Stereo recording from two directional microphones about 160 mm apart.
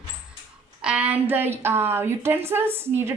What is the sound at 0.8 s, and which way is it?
A woman's voice, 10° right (ahead or behind).